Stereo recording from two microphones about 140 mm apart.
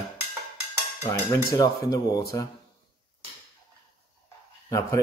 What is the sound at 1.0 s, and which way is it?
Speech, 25° left (ahead or behind).